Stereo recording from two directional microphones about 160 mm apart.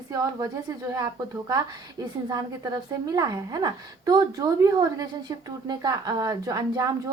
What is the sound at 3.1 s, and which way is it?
Speech, 25° right (ahead or behind).